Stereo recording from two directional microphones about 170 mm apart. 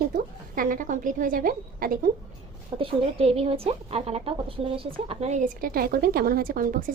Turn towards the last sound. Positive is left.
turn(degrees=-55)  # may be behind; listen again after turning